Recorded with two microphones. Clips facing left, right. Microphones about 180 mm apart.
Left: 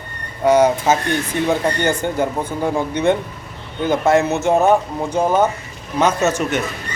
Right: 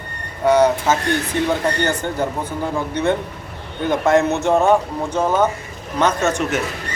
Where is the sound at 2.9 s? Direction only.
15° left (ahead or behind).